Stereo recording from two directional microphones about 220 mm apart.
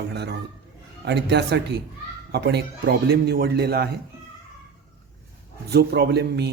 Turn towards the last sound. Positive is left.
turn(degrees=-50)  # may be behind; listen again after turning